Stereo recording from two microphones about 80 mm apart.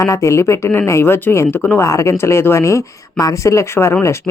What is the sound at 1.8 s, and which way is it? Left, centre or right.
Speech, left.